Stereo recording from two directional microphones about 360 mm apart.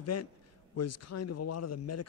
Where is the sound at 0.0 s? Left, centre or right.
Left.